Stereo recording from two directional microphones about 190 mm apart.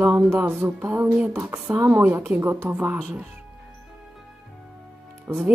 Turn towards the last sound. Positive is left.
turn(degrees=-15)  # may be behind; listen again after turning